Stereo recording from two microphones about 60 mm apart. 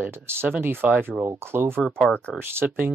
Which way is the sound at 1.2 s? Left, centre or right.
Right.